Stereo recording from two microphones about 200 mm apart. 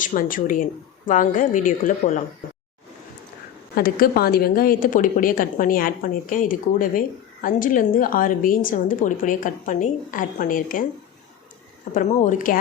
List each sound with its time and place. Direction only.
0.0 s speech: 40° left (ahead or behind)
3.8 s a woman's voice: 50° left (ahead or behind)
11.9 s speech: 40° left (ahead or behind)